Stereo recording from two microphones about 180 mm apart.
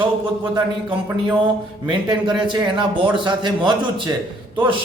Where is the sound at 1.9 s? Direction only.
25° right (ahead or behind).